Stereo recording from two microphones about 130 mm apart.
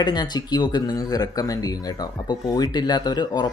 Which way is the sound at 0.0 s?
30° left (ahead or behind).